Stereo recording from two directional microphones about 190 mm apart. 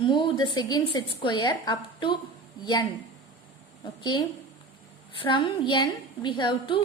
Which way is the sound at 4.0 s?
25° left (ahead or behind).